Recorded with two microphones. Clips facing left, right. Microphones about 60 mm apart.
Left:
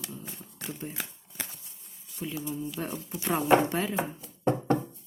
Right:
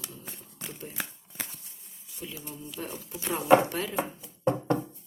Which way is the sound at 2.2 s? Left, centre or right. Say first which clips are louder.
Left 7 dB; left.